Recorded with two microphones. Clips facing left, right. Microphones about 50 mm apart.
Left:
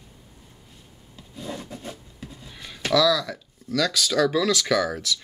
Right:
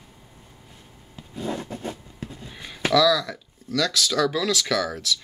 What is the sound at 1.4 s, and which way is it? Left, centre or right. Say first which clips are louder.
Zipper: right 5 dB; right.